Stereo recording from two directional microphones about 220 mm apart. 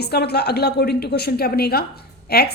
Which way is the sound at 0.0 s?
45° left (ahead or behind).